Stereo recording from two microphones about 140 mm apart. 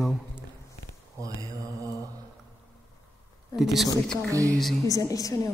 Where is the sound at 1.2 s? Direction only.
25° right (ahead or behind).